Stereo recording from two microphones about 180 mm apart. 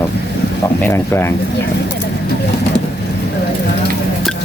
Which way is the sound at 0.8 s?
15° left (ahead or behind).